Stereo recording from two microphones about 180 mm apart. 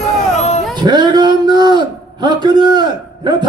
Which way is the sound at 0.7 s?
25° right (ahead or behind).